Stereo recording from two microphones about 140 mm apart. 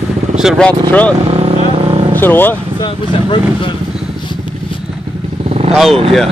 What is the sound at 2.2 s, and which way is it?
Speech, 15° left (ahead or behind).